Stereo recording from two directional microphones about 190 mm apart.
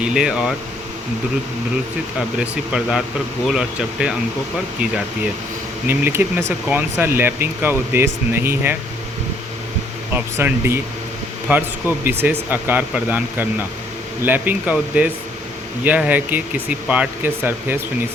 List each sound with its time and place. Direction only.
0.0 s speech: 5° right (ahead or behind)
2.4 s speech: 5° right (ahead or behind)
5.9 s speech: 10° right (ahead or behind)
10.3 s speech: 15° right (ahead or behind)
14.3 s speech: 10° right (ahead or behind)